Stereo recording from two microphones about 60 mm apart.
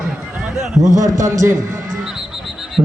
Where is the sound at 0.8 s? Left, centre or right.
Right.